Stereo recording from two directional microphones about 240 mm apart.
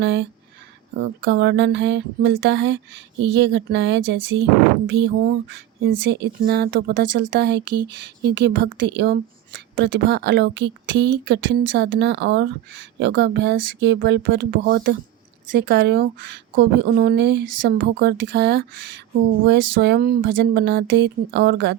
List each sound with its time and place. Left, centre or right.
0.0 s speech: right